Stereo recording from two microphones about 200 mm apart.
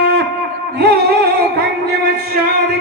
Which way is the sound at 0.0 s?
55° right (ahead or behind).